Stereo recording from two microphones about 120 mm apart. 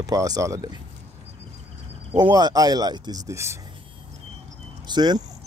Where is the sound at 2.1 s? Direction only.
35° right (ahead or behind).